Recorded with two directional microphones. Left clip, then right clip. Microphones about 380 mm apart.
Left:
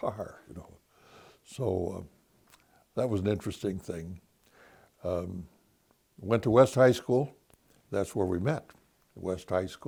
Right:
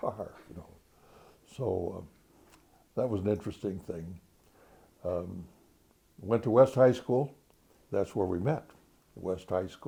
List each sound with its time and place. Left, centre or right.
0.0 s speech: left
1.0 s a sound: left
2.5 s speech: left
5.0 s speech: left
6.2 s speech: left